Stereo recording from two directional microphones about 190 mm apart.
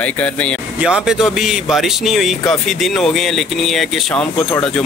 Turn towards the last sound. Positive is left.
turn(degrees=0)  # may be behind; listen again after turning